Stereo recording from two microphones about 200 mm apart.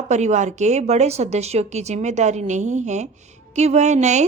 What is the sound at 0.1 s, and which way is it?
A woman's voice, 35° right (ahead or behind).